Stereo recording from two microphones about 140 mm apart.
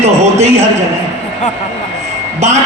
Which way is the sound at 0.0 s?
50° right (ahead or behind).